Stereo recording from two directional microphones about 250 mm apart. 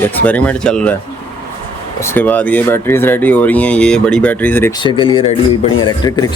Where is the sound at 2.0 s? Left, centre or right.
Centre.